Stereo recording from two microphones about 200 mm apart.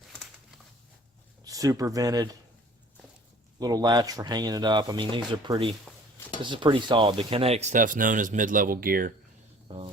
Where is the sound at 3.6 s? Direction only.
20° right (ahead or behind); by 9.1 s 45° right (ahead or behind).